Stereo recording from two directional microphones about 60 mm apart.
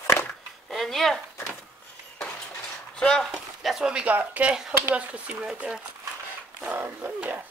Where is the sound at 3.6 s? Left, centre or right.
Centre.